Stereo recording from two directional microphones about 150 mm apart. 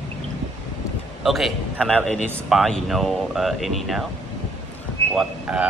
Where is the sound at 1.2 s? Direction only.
Centre (ahead or behind).